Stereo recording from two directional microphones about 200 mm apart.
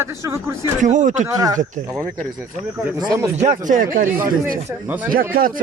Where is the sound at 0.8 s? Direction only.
40° right (ahead or behind).